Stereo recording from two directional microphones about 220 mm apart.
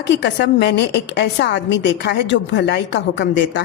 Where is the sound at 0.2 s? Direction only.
50° left (ahead or behind).